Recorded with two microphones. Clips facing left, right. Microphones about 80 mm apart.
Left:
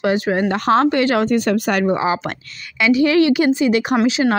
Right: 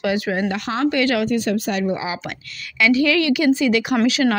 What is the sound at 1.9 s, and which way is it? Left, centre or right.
Speech, left.